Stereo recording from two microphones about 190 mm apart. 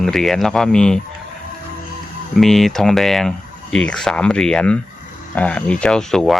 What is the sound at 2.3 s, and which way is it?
Speech, centre (ahead or behind).